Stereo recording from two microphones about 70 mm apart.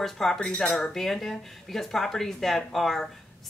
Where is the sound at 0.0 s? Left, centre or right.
Centre.